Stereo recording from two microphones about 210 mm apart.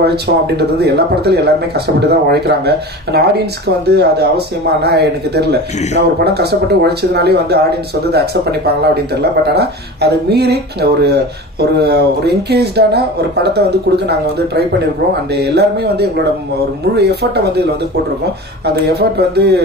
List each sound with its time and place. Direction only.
0.0 s speech: 50° right (ahead or behind)
18.9 s speech: 50° right (ahead or behind)